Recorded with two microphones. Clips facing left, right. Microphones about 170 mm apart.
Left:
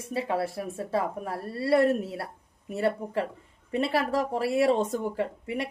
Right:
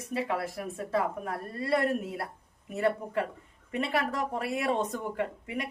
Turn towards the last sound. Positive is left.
turn(degrees=30)  # may be behind; listen again after turning